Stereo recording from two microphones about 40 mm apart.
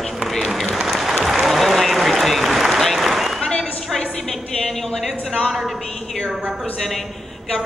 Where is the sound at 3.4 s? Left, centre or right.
Centre.